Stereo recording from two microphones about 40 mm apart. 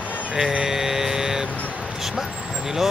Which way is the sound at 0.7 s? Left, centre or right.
Centre.